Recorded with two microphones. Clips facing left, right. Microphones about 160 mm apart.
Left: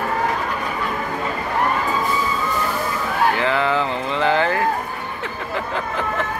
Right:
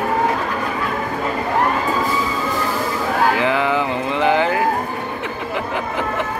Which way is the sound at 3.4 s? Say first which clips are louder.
Right 1 dB; 15° right (ahead or behind).